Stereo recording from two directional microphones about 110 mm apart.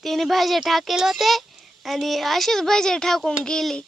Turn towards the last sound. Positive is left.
turn(degrees=5)  # may be behind; listen again after turning